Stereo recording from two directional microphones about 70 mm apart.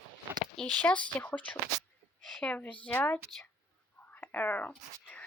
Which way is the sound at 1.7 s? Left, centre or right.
Right.